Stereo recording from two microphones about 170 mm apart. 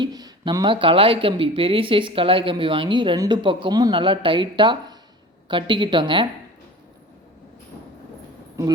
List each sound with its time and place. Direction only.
0.0 s speech: 25° right (ahead or behind)